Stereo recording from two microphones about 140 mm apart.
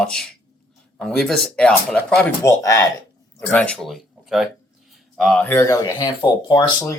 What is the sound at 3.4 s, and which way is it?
Speech, 10° left (ahead or behind).